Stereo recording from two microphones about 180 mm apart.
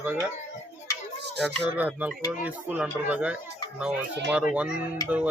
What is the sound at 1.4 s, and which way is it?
Speech, 5° right (ahead or behind).